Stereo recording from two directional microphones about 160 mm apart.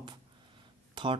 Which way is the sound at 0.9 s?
30° right (ahead or behind).